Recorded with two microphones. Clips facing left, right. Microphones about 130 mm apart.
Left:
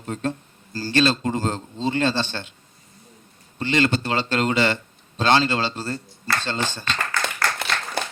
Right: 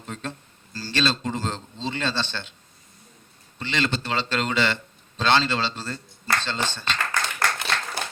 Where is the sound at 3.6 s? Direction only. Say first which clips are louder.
Left 6 dB; 45° left (ahead or behind).